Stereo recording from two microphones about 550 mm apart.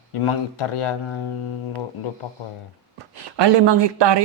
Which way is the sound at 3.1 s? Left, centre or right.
Right.